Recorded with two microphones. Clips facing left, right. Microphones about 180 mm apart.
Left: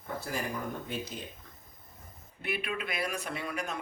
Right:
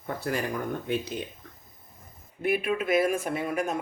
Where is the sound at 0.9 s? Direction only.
65° right (ahead or behind).